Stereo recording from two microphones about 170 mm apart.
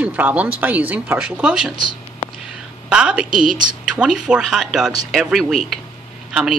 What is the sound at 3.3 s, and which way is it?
Speech, 50° right (ahead or behind).